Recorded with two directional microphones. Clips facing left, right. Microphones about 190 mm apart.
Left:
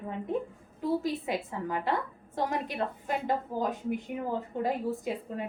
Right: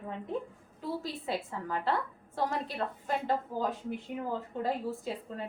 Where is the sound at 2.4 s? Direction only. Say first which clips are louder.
Left 2 dB; 15° left (ahead or behind).